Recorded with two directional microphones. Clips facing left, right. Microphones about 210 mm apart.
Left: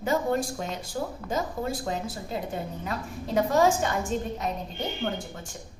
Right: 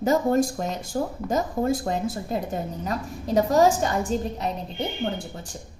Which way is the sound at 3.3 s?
40° right (ahead or behind).